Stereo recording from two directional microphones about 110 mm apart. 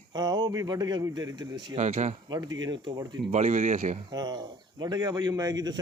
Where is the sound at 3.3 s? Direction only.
85° right.